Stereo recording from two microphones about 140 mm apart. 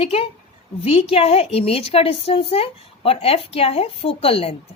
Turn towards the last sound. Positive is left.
turn(degrees=45)  # may be behind; listen again after turning